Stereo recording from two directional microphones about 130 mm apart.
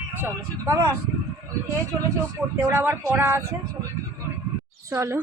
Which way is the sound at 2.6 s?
15° right (ahead or behind).